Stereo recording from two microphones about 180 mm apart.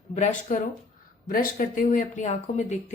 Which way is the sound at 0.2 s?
45° left (ahead or behind).